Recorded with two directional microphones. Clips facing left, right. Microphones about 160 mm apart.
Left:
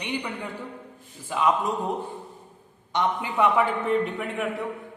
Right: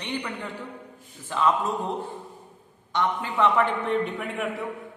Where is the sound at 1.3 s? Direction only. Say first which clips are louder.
Even; 10° left (ahead or behind).